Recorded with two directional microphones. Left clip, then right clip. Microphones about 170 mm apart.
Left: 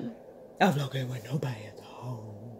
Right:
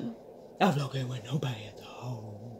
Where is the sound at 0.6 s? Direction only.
30° left (ahead or behind); by 1.6 s 10° left (ahead or behind).